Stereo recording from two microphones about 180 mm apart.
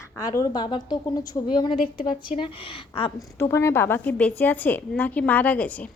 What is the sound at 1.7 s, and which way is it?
Speech, 50° left (ahead or behind).